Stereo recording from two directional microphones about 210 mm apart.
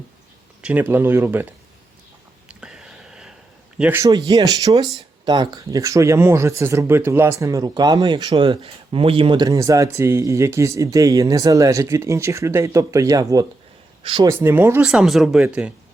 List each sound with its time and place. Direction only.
0.6 s speech: 10° right (ahead or behind)
2.5 s whispering: 5° right (ahead or behind)
3.8 s speech: 10° right (ahead or behind)
14.3 s speech: 10° right (ahead or behind)